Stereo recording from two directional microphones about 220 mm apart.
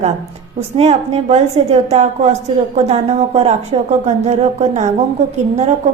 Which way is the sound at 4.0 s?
30° right (ahead or behind).